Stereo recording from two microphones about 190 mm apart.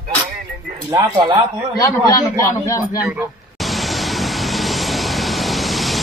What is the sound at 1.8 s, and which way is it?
A man's voice, 20° left (ahead or behind).